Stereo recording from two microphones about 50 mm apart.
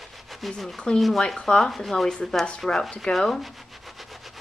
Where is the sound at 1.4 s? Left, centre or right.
Centre.